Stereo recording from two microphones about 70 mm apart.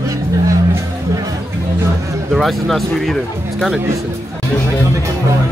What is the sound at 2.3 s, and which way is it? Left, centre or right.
Speech, centre.